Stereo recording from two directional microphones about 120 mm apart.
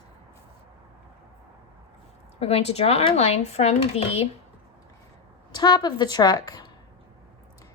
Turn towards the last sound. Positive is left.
turn(degrees=35)  # may be behind; listen again after turning